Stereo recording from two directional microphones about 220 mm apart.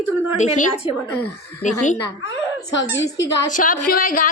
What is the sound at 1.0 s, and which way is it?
Speech, 10° left (ahead or behind).